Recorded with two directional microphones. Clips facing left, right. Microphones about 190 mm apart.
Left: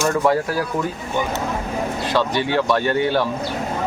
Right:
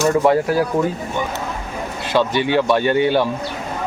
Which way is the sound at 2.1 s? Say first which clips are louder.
Right 4 dB; 20° right (ahead or behind).